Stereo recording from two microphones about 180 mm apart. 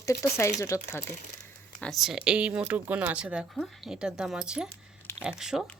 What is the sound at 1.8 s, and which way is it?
Speech, centre (ahead or behind).